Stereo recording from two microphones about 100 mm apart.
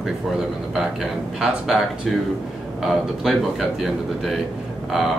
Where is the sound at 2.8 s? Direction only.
Centre (ahead or behind).